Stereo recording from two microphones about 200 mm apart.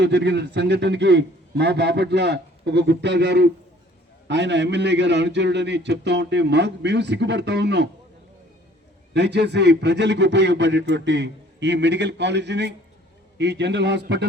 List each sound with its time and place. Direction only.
0.0 s a man's voice: 60° right (ahead or behind)
9.1 s a man's voice: 60° right (ahead or behind)